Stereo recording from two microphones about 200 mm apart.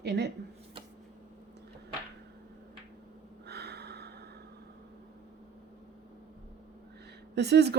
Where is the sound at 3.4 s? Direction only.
55° right (ahead or behind).